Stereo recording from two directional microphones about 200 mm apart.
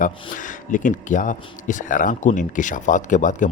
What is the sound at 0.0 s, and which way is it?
Speech, 40° left (ahead or behind).